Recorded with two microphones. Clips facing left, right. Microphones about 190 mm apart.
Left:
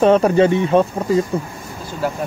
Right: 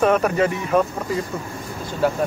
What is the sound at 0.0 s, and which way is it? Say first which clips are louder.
Speech: left 5 dB; 30° left (ahead or behind).